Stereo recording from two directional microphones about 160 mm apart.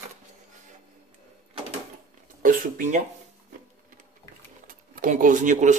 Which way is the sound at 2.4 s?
55° right (ahead or behind).